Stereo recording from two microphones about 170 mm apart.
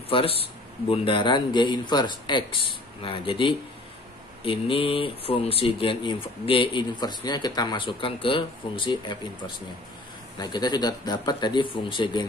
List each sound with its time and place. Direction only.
0.1 s speech: 35° left (ahead or behind)